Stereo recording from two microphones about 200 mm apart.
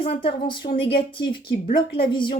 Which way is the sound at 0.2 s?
25° left (ahead or behind).